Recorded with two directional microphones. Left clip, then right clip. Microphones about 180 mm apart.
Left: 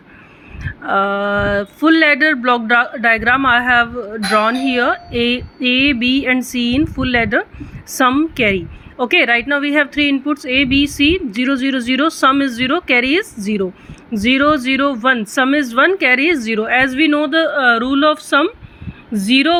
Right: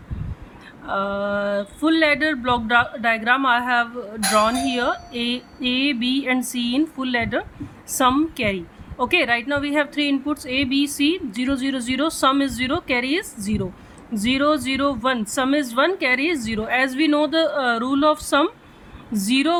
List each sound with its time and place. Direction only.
0.6 s a woman's voice: 20° left (ahead or behind)